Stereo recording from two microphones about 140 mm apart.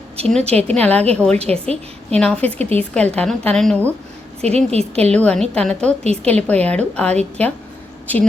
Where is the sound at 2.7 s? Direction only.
5° left (ahead or behind).